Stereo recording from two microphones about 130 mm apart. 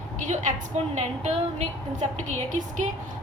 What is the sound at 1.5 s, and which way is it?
A woman's voice, 65° right (ahead or behind).